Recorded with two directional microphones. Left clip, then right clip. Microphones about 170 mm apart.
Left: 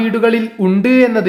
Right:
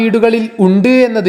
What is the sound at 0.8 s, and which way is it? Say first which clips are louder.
Speech: even; 30° right (ahead or behind).